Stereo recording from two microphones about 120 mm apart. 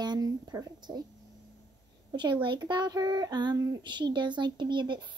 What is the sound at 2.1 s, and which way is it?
A woman's voice, 40° right (ahead or behind).